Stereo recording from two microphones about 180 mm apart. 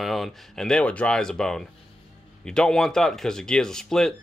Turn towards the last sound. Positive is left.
turn(degrees=5)  # may be behind; listen again after turning